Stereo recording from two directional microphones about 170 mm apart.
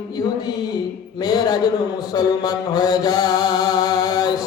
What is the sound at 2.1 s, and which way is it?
Mantra, 20° left (ahead or behind).